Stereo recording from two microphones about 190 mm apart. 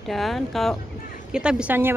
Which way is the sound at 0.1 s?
Centre (ahead or behind).